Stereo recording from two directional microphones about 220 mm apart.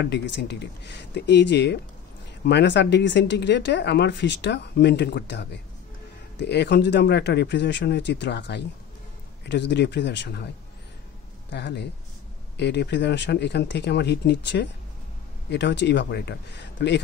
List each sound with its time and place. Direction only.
0.0 s speech: 50° left (ahead or behind)
11.5 s speech: 50° left (ahead or behind)